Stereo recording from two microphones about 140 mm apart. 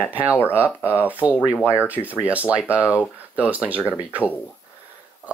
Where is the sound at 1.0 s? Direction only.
10° right (ahead or behind).